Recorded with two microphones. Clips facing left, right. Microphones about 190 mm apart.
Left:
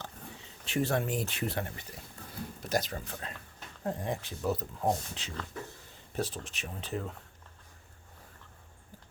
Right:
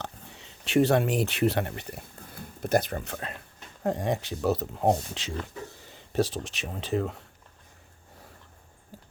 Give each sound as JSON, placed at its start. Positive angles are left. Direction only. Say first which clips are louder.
{"t": 0.0, "sound": "speech", "louder": "right 4 dB", "side_deg": -75}